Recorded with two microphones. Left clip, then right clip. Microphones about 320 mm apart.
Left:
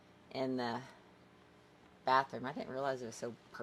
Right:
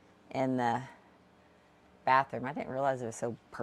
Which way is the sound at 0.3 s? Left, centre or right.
Right.